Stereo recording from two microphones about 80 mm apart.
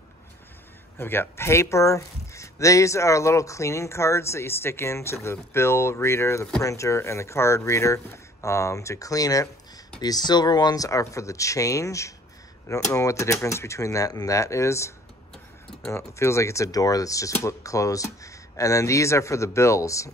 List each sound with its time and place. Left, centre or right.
0.9 s speech: left
10.0 s speech: left
15.9 s speech: left